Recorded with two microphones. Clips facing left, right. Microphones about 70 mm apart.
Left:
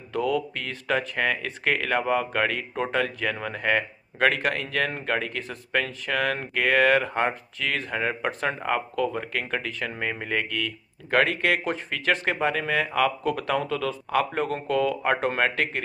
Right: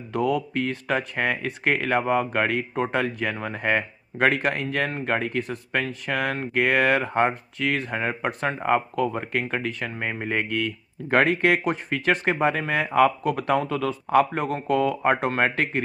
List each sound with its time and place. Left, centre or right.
0.1 s speech: centre